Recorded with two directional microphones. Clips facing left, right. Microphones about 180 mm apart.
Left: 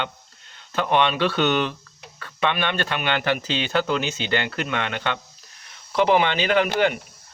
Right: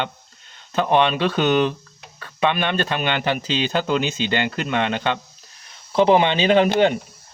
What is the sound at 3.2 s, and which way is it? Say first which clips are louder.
Speech: right 2 dB; 20° right (ahead or behind).